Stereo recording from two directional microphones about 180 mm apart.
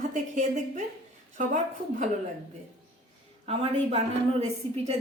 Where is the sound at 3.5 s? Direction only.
35° right (ahead or behind).